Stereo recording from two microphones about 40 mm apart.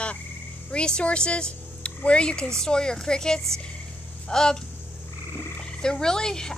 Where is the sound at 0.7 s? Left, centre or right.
Left.